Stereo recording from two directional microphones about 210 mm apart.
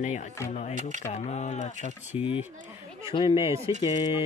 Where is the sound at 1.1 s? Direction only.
35° left (ahead or behind).